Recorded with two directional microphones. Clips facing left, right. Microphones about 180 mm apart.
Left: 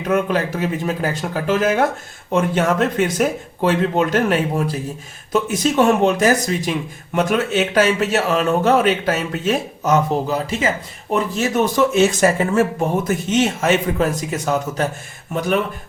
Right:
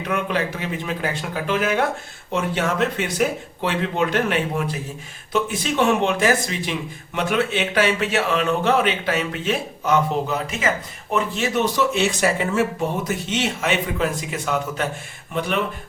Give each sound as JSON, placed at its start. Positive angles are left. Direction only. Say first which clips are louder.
{"t": 0.0, "sound": "a man's voice", "louder": "left 5 dB", "side_deg": 45}
{"t": 11.1, "sound": "speech", "louder": "left 3 dB", "side_deg": 45}